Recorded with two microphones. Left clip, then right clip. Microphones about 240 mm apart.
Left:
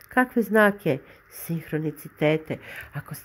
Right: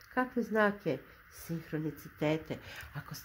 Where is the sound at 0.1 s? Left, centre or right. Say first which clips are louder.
Left 11 dB; left.